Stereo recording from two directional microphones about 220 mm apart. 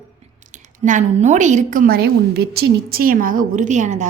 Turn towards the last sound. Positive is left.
turn(degrees=-35)  # may be behind; listen again after turning